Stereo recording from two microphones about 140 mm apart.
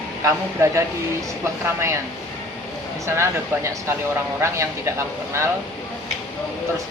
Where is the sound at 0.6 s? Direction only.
20° right (ahead or behind).